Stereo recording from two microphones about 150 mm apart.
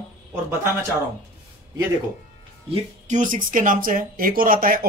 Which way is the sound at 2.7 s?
55° right (ahead or behind).